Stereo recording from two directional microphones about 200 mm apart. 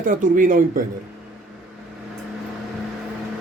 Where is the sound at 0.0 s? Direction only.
40° right (ahead or behind).